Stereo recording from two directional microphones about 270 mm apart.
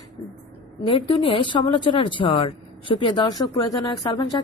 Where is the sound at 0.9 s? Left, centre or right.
Centre.